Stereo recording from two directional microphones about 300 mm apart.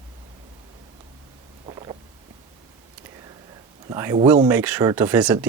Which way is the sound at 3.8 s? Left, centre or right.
Centre.